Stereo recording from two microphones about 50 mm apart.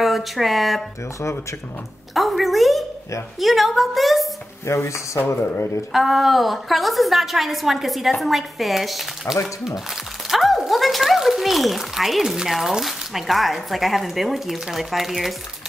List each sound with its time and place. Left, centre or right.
0.0 s speech: centre
2.1 s a woman's voice: centre
4.6 s speech: left
5.3 s speech: left
5.9 s a woman's voice: centre
10.2 s music: centre
10.7 s a sound: centre
12.4 s a woman's voice: centre